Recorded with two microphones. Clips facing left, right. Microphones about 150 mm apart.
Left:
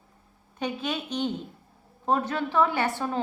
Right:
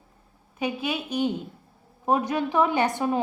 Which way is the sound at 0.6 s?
10° right (ahead or behind).